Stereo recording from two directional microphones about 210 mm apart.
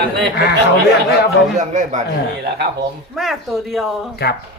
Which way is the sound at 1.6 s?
35° right (ahead or behind).